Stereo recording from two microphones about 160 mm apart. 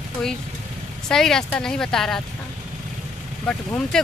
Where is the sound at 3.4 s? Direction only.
5° left (ahead or behind).